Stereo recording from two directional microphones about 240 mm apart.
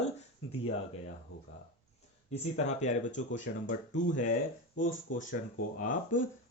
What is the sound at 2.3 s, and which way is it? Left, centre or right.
Speech, left.